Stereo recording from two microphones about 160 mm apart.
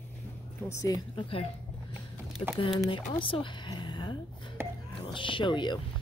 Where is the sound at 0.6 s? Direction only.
20° left (ahead or behind).